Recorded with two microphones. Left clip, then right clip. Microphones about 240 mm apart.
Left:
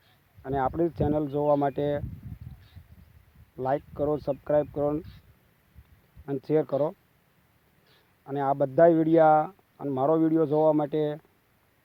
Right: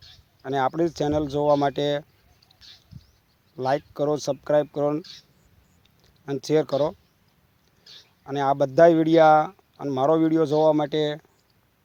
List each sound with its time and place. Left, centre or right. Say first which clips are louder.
0.4 s speech: right 3 dB; centre
3.6 s speech: right 4 dB; centre
6.2 s speech: right 3 dB; centre
8.2 s speech: right 4 dB; centre